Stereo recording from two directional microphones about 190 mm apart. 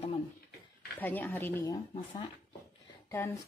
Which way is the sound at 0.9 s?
10° left (ahead or behind).